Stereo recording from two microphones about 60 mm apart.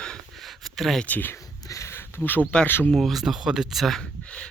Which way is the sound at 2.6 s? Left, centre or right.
Left.